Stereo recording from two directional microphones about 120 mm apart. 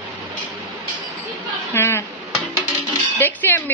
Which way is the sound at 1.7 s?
20° left (ahead or behind).